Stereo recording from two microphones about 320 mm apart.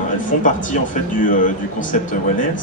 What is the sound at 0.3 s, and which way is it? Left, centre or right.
Speech, left.